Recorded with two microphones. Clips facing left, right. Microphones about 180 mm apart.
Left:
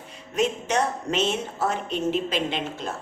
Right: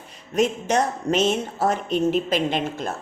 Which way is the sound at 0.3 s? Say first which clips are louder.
Right 3 dB; 40° right (ahead or behind).